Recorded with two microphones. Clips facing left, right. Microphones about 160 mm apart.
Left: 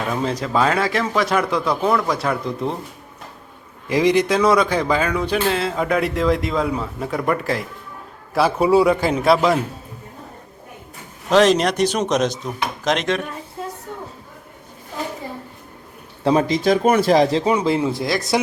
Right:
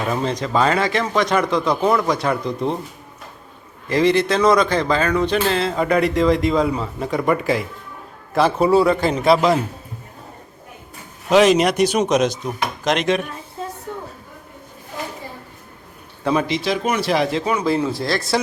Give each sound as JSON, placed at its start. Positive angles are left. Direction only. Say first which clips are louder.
{"t": 0.1, "sound": "speech", "louder": "even", "side_deg": 5}
{"t": 3.8, "sound": "a man's voice", "louder": "even", "side_deg": 15}
{"t": 11.3, "sound": "speech", "louder": "right 1 dB", "side_deg": -5}
{"t": 16.2, "sound": "speech", "louder": "left 3 dB", "side_deg": 40}
{"t": 17.4, "sound": "speech", "louder": "left 1 dB", "side_deg": 25}